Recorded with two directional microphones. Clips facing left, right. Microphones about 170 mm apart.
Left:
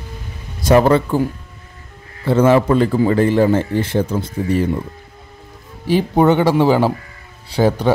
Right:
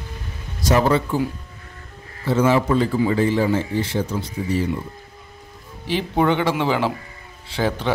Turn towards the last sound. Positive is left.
turn(degrees=40)  # may be behind; listen again after turning